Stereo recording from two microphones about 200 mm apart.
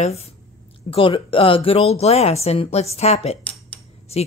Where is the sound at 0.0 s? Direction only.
30° left (ahead or behind).